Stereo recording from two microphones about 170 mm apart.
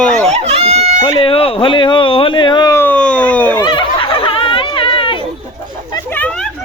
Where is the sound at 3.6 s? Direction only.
25° left (ahead or behind).